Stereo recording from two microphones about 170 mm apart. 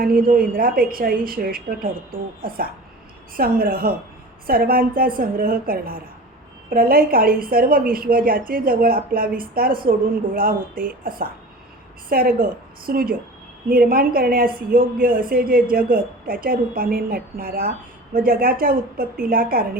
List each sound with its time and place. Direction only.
0.0 s a woman's voice: 55° right (ahead or behind)